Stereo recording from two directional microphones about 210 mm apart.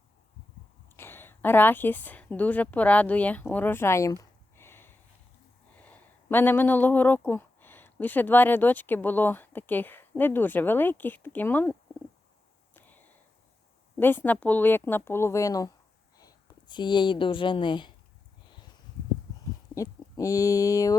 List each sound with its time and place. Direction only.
0.9 s a woman's voice: 10° left (ahead or behind)
12.7 s a sound: 10° left (ahead or behind)
13.9 s speech: 10° left (ahead or behind)
19.7 s speech: 15° left (ahead or behind)